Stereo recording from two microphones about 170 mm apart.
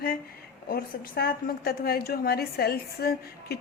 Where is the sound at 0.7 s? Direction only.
65° left (ahead or behind).